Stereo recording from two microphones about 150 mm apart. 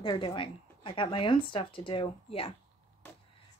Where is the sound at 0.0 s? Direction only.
35° left (ahead or behind).